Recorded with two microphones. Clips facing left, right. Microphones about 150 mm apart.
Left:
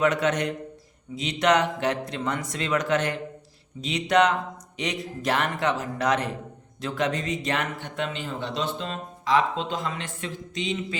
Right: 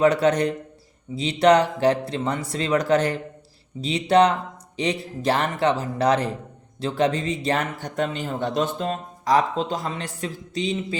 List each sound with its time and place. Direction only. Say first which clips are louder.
0.0 s speech: right 5 dB; 35° right (ahead or behind)